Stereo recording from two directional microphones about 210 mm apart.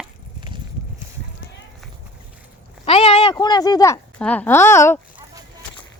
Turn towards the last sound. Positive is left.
turn(degrees=10)  # may be behind; listen again after turning